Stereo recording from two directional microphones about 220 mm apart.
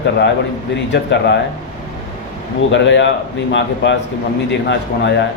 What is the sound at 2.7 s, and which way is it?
A man's voice, 55° left (ahead or behind).